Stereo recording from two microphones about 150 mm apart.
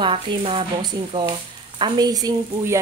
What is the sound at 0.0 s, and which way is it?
A woman's voice, 35° right (ahead or behind).